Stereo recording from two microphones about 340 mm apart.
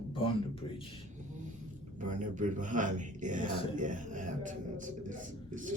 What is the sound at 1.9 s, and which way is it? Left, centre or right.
Speech, right.